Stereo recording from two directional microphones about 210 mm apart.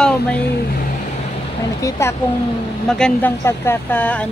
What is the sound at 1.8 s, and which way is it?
Speech, 15° left (ahead or behind).